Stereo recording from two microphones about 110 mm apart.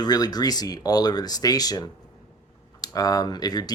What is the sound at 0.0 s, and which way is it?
Speech, 35° left (ahead or behind).